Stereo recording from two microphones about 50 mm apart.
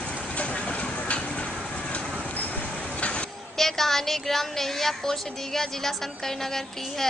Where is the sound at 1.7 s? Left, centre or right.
Left.